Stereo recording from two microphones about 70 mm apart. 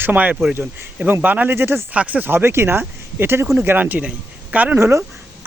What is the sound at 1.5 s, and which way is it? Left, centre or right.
Speech, right.